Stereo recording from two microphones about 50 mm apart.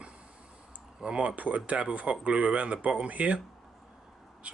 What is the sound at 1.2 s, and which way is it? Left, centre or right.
Speech, right.